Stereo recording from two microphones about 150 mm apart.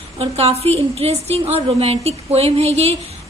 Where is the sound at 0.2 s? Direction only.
45° right (ahead or behind).